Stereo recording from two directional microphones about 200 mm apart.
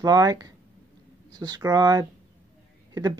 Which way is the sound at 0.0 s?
20° right (ahead or behind).